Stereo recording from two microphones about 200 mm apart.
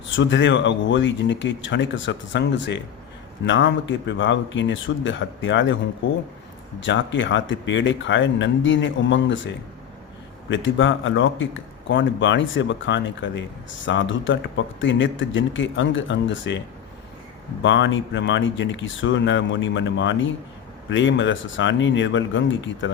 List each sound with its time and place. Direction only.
0.2 s speech: 65° left (ahead or behind)
6.7 s speech: 65° left (ahead or behind)
10.5 s speech: 70° left (ahead or behind)